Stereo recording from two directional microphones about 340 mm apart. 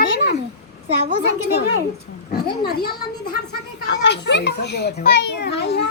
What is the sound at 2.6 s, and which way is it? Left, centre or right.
A child's voice, left.